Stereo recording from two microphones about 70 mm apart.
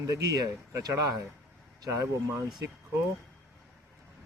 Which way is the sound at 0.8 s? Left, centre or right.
Right.